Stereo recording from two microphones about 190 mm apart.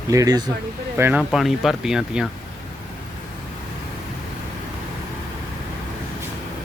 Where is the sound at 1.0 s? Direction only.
5° right (ahead or behind).